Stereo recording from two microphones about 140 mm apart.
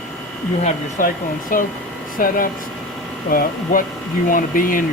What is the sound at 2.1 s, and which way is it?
Speech, 90° left.